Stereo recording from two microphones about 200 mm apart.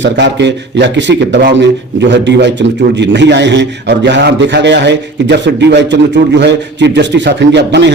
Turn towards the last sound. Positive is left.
turn(degrees=-60)  # may be behind; listen again after turning